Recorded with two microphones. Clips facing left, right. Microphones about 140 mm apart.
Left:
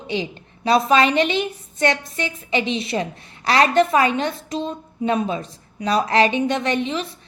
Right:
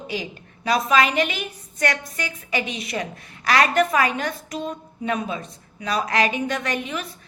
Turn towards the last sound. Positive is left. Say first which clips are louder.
# left 5 dB
turn(degrees=25)  # may be behind; listen again after turning